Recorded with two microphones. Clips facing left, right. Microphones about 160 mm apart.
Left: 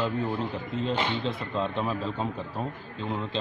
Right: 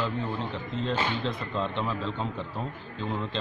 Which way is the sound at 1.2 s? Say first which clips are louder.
Left 1 dB; 5° left (ahead or behind).